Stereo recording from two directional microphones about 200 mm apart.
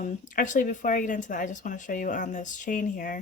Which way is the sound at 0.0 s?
40° left (ahead or behind).